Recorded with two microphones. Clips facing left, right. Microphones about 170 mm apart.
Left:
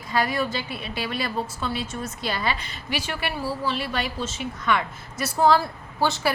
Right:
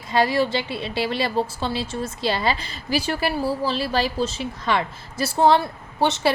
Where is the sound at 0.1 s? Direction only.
30° right (ahead or behind).